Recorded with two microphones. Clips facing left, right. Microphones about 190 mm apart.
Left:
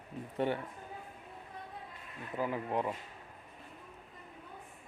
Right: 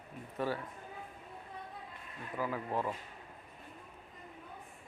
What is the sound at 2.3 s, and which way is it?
Speech, 20° left (ahead or behind).